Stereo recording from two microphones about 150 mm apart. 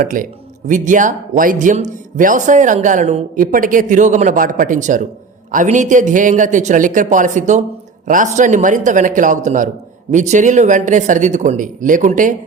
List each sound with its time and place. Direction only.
0.0 s speech: 60° right (ahead or behind)
3.4 s speech: 65° right (ahead or behind)